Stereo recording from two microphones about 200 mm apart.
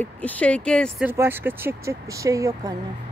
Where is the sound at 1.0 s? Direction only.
10° right (ahead or behind).